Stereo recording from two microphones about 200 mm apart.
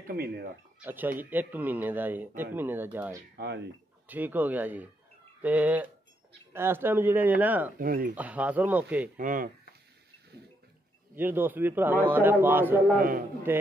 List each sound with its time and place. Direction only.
0.0 s speech: 50° right (ahead or behind)
0.7 s speech: 10° right (ahead or behind)
3.3 s speech: 60° right (ahead or behind)
4.1 s speech: 10° right (ahead or behind)
7.8 s speech: 45° right (ahead or behind)
8.1 s speech: 5° right (ahead or behind)
9.1 s speech: 40° right (ahead or behind)
11.1 s speech: 10° right (ahead or behind)